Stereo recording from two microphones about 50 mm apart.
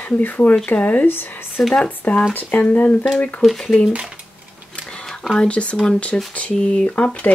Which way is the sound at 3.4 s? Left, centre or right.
Centre.